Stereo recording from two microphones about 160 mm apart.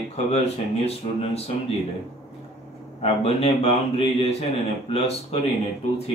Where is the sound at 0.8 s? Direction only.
40° left (ahead or behind).